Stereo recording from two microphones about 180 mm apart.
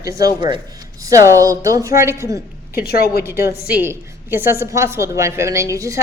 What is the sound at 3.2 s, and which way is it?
A woman's voice, 15° right (ahead or behind).